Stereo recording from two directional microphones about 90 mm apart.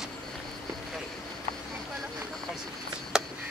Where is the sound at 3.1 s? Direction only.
5° right (ahead or behind).